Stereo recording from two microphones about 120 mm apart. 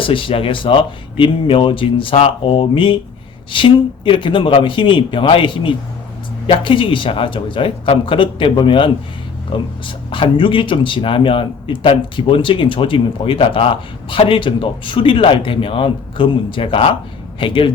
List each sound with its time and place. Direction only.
0.0 s speech: 45° left (ahead or behind)